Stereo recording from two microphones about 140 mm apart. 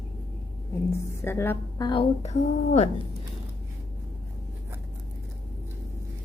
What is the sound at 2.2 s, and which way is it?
Speech, 55° left (ahead or behind).